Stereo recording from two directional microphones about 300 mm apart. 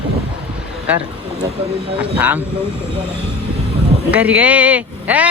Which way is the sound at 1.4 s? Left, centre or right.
Centre.